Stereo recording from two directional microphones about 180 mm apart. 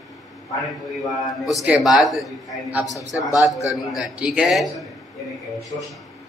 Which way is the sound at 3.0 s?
20° left (ahead or behind).